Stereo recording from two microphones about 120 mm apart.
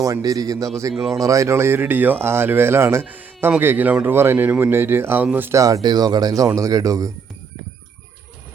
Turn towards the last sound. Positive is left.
turn(degrees=-30)  # may be behind; listen again after turning